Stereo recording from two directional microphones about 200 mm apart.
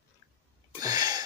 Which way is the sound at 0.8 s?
20° right (ahead or behind).